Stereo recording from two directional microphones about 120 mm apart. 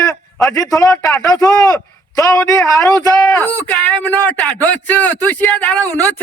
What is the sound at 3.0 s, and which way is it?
Speech, 30° left (ahead or behind).